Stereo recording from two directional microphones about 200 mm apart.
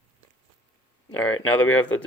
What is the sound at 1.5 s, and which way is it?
Speech, 5° left (ahead or behind).